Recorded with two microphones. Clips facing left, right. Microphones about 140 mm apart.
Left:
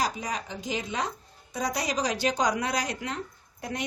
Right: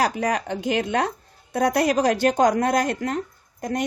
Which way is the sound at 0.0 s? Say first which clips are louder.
Right 8 dB; 65° right (ahead or behind).